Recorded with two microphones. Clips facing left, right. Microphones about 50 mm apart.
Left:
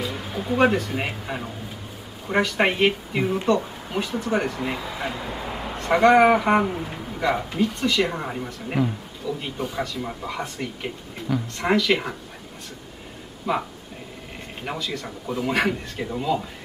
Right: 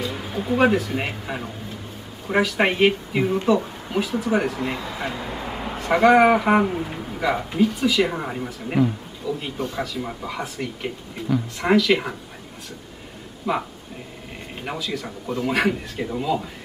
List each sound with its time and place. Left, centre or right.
0.0 s speech: centre
13.5 s speech: centre